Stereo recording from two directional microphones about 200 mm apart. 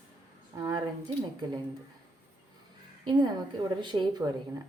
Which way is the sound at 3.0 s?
20° right (ahead or behind).